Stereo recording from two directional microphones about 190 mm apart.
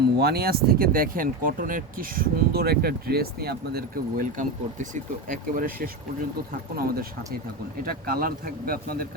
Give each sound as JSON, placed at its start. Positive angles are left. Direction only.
{"t": 0.2, "sound": "speech", "side_deg": -55}